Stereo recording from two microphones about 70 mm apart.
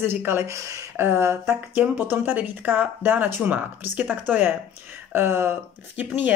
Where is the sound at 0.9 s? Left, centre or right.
Right.